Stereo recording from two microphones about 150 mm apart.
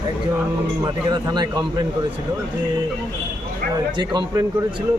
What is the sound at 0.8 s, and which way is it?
Speech, 30° right (ahead or behind).